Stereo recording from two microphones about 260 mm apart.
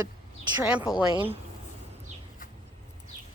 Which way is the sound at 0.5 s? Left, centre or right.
Centre.